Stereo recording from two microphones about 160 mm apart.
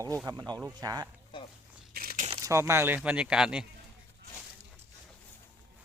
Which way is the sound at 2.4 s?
15° right (ahead or behind).